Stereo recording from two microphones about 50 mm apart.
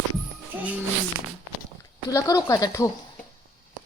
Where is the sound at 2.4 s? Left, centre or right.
Left.